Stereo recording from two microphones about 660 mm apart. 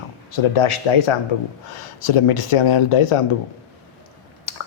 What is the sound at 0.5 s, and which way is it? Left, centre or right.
Speech, left.